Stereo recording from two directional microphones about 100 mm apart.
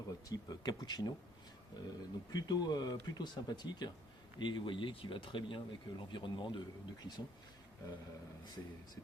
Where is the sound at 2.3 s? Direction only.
40° left (ahead or behind).